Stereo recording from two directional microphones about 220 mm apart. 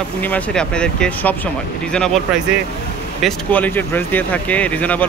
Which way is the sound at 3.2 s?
5° left (ahead or behind).